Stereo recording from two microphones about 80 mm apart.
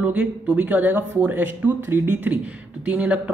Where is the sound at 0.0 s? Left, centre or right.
Centre.